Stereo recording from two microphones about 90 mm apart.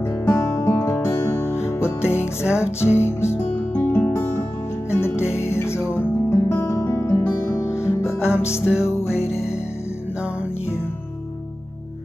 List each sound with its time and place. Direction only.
0.0 s music: 30° left (ahead or behind)
2.1 s music: 15° right (ahead or behind)
2.6 s music: 30° left (ahead or behind)